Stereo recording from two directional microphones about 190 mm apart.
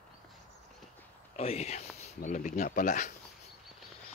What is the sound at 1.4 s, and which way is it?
Speech, 35° left (ahead or behind).